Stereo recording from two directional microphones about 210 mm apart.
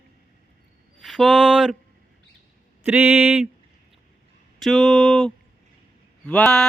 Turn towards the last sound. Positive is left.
turn(degrees=5)  # may be behind; listen again after turning